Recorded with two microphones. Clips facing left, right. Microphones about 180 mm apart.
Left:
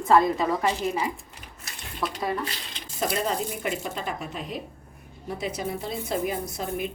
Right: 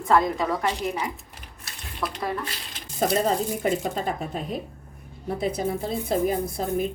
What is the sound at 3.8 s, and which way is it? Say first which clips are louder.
Speech: right 4 dB; 40° right (ahead or behind).